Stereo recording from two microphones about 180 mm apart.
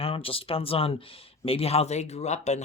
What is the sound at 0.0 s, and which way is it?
Speech, 30° left (ahead or behind).